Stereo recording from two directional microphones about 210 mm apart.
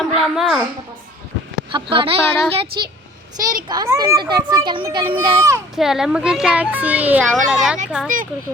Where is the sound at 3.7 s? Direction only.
15° right (ahead or behind).